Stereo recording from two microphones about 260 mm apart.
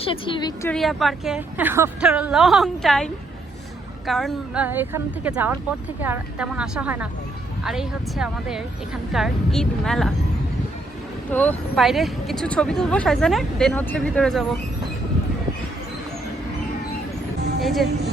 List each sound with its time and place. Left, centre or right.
0.0 s a woman's voice: centre
0.7 s speech: centre
11.3 s speech: centre
17.6 s speech: centre